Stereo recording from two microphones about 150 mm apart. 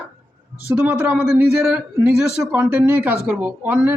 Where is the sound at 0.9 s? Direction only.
10° right (ahead or behind).